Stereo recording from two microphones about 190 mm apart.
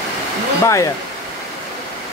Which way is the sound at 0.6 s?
15° left (ahead or behind).